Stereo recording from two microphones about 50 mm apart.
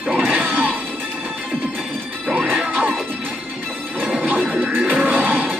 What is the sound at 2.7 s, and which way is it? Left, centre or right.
Music, right.